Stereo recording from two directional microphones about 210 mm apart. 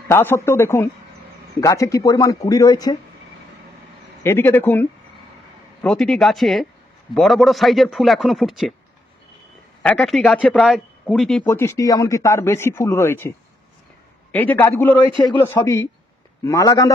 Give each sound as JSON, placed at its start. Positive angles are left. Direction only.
{"t": 0.1, "sound": "speech", "side_deg": 10}
{"t": 4.2, "sound": "a man's voice", "side_deg": 10}
{"t": 9.8, "sound": "speech", "side_deg": 0}
{"t": 14.3, "sound": "speech", "side_deg": 10}